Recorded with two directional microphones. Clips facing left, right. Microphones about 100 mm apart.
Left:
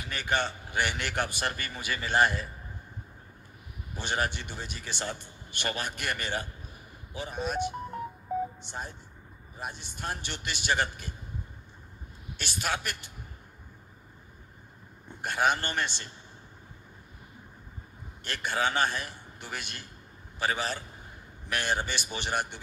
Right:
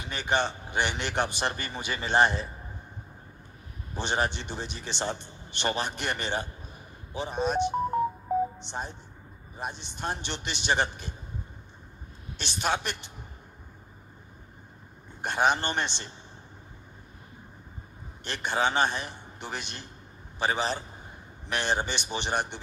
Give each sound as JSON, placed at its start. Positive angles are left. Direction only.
{"t": 0.0, "sound": "speech", "side_deg": -20}
{"t": 3.9, "sound": "speech", "side_deg": -25}
{"t": 12.4, "sound": "speech", "side_deg": -25}
{"t": 15.2, "sound": "speech", "side_deg": -25}
{"t": 18.2, "sound": "speech", "side_deg": -25}